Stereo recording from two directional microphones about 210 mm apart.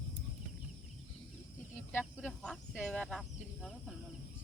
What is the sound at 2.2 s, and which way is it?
Speech, 5° left (ahead or behind).